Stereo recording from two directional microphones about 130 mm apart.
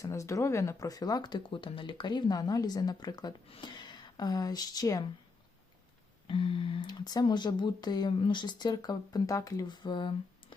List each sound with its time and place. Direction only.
0.0 s speech: 25° left (ahead or behind)
6.2 s speech: 40° left (ahead or behind)